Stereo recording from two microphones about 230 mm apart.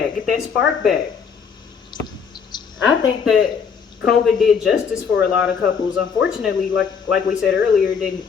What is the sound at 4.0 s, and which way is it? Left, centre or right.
Speech, centre.